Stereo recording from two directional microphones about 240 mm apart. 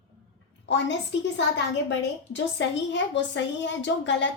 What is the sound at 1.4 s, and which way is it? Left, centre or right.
A woman's voice, left.